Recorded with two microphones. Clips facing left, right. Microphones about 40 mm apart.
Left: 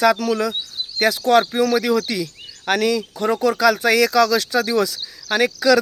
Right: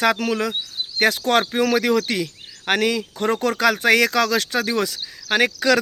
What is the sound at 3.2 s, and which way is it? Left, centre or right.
Speech, right.